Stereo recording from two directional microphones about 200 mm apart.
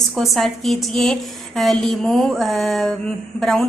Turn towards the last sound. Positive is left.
turn(degrees=0)  # may be behind; listen again after turning